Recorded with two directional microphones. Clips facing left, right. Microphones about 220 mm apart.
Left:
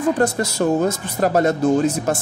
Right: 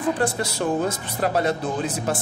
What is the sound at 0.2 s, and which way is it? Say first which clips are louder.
Speech: left 5 dB; 45° left (ahead or behind).